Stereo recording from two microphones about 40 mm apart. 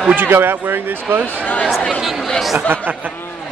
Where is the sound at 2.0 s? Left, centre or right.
Centre.